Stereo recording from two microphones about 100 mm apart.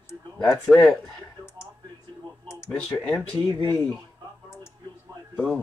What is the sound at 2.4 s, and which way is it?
Clicking, 25° left (ahead or behind).